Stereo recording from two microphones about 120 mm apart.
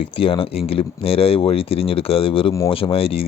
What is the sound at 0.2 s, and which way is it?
Speech, 50° left (ahead or behind).